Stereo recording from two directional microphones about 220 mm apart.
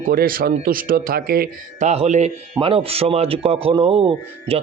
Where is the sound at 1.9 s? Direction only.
30° right (ahead or behind).